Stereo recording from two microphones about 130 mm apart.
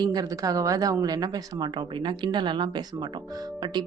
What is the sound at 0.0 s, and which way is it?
A woman's voice, 30° right (ahead or behind).